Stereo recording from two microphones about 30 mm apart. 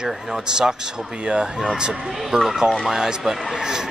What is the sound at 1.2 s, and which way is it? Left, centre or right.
Speech, right.